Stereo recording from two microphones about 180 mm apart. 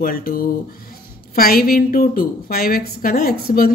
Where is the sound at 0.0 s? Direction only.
55° left (ahead or behind).